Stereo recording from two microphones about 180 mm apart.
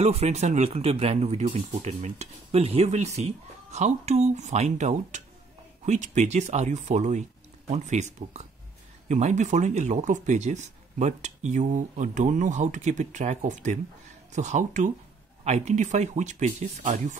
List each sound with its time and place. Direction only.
0.0 s speech: 35° right (ahead or behind)